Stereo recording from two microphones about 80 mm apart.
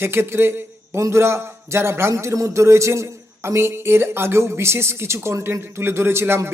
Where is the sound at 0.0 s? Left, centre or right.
Right.